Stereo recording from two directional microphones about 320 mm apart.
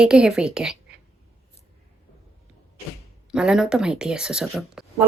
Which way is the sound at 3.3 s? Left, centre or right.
Centre.